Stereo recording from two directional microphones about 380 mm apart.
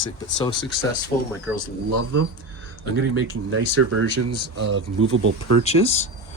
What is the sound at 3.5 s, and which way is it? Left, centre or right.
Speech, right.